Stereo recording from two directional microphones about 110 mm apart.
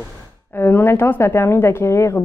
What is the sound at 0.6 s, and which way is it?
Speech, 20° left (ahead or behind).